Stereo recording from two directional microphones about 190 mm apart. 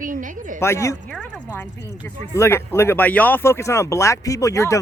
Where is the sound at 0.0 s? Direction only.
45° right (ahead or behind).